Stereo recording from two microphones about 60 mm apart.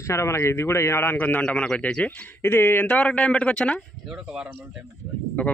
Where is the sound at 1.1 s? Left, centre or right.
Left.